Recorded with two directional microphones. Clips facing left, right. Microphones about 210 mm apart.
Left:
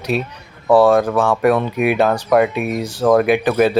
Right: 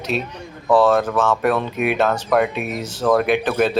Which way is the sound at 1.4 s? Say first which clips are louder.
Left 4 dB; centre (ahead or behind).